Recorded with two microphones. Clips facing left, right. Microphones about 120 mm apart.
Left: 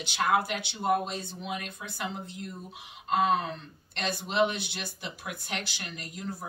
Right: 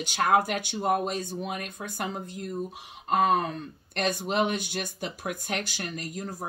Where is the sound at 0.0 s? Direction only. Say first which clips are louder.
Right 3 dB; 50° right (ahead or behind).